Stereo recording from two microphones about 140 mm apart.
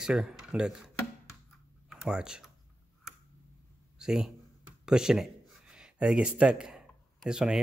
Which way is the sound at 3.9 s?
5° right (ahead or behind).